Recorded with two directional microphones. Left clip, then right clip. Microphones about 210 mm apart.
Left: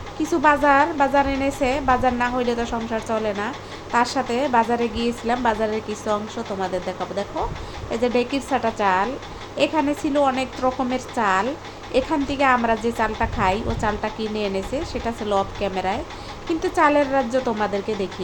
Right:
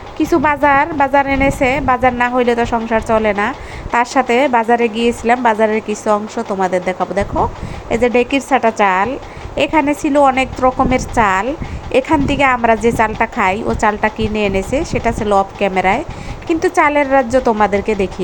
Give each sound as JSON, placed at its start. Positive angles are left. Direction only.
{"t": 0.2, "sound": "a woman's voice", "side_deg": -20}